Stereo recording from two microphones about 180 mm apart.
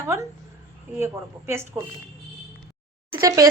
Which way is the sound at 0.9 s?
15° right (ahead or behind).